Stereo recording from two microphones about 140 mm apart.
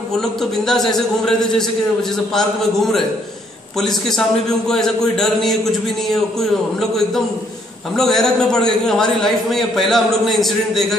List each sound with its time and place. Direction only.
0.2 s a man's voice: centre (ahead or behind)
7.9 s a man's voice: centre (ahead or behind)